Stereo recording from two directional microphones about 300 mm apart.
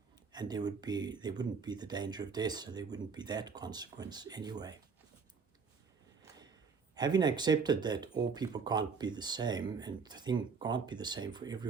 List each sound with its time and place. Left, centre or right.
0.3 s speech: centre
6.2 s a sound: centre
6.9 s speech: centre